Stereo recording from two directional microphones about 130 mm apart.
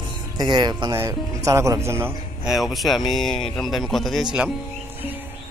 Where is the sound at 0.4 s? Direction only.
35° right (ahead or behind).